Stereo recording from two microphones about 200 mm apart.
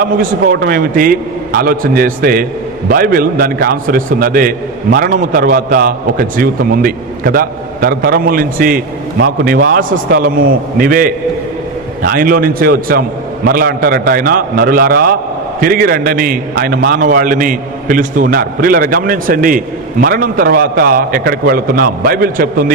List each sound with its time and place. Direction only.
0.0 s a man's voice: 45° right (ahead or behind)